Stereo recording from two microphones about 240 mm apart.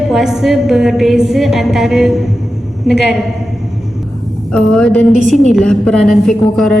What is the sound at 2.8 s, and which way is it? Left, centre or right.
Speech, left.